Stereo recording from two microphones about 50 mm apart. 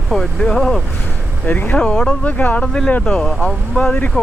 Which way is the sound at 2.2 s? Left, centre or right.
Left.